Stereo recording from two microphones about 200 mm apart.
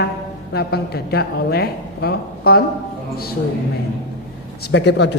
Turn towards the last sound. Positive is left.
turn(degrees=60)  # may be behind; listen again after turning